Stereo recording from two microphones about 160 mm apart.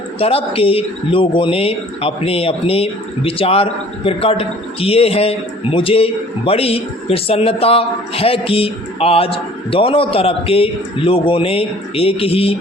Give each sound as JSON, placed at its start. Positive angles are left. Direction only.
{"t": 0.2, "sound": "a man's voice", "side_deg": 35}